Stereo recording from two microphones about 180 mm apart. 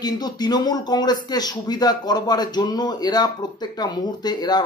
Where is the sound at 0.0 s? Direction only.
20° left (ahead or behind).